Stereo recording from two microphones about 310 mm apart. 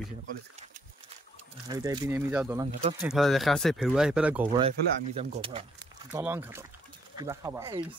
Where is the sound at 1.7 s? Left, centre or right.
Centre.